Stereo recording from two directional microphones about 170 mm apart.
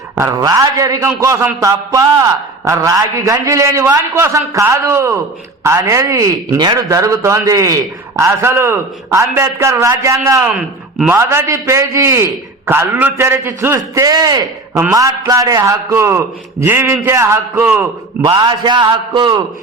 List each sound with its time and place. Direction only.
0.2 s a man's voice: 20° right (ahead or behind)
10.5 s a man's voice: 5° right (ahead or behind)
18.2 s a man's voice: 25° right (ahead or behind)